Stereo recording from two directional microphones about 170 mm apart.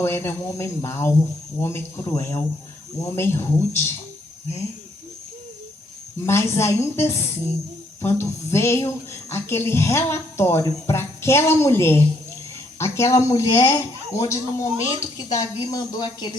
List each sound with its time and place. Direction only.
0.0 s speech: 15° left (ahead or behind)
6.2 s speech: 15° left (ahead or behind)